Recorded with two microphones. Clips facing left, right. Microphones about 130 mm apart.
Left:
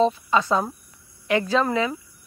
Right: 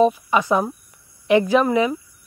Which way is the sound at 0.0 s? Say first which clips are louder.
Right 3 dB; 15° right (ahead or behind).